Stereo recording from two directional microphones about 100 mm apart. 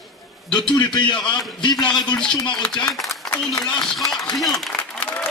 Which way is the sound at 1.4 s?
40° left (ahead or behind).